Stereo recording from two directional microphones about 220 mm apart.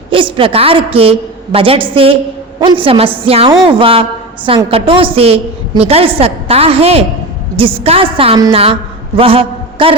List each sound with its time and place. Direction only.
0.1 s a woman's voice: 25° right (ahead or behind)